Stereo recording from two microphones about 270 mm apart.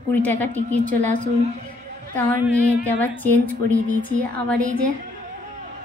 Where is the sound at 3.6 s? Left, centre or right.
Right.